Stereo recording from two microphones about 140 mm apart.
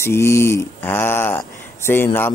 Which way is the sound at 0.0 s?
20° left (ahead or behind).